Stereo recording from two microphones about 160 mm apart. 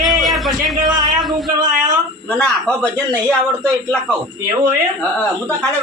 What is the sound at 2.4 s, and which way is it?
Speech, 5° left (ahead or behind).